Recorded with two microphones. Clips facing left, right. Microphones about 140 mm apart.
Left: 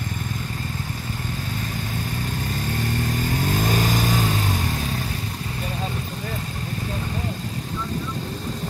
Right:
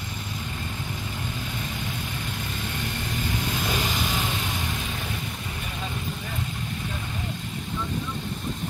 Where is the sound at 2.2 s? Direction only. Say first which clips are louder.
Left 5 dB; 40° left (ahead or behind).